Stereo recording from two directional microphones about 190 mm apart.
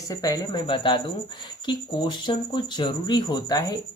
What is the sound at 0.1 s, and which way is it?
Speech, 20° left (ahead or behind).